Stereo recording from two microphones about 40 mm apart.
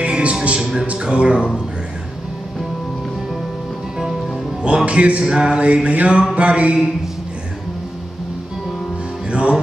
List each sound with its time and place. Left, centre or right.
0.0 s music: right
0.7 s speech: right
4.6 s speech: right
6.3 s music: right
9.3 s music: right